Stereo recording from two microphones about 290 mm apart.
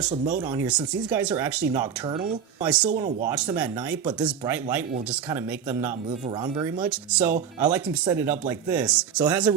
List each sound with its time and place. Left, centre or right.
0.1 s speech: right
0.5 s speech: centre